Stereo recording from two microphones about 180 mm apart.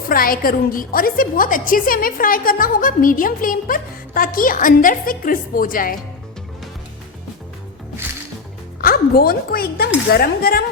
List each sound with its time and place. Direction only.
0.1 s a woman's voice: 55° left (ahead or behind)
8.8 s speech: 55° left (ahead or behind)